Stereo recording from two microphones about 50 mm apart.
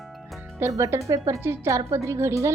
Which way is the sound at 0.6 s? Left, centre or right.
Right.